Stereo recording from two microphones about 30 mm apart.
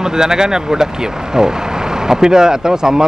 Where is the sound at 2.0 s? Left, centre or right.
Centre.